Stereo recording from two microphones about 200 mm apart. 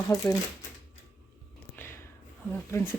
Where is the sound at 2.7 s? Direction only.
15° left (ahead or behind).